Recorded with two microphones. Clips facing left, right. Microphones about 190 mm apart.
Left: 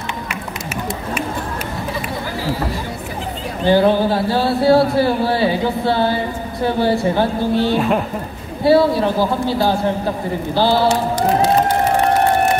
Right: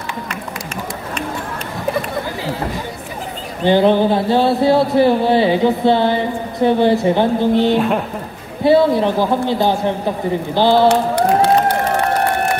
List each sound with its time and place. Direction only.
3.6 s speech: 20° right (ahead or behind)
7.7 s speech: centre (ahead or behind)
8.6 s speech: 20° right (ahead or behind)
10.9 s speech: 65° right (ahead or behind)